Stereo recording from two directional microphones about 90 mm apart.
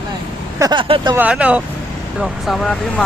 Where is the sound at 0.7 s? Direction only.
70° right (ahead or behind).